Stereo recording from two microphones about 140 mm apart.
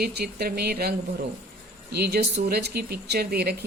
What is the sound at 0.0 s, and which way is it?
Speech, 90° right.